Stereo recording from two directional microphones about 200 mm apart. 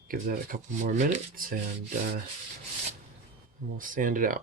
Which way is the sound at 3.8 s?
45° right (ahead or behind).